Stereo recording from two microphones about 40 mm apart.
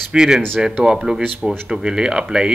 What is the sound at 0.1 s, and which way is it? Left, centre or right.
Speech, centre.